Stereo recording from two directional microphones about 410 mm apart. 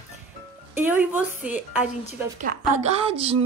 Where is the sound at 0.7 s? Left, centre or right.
Centre.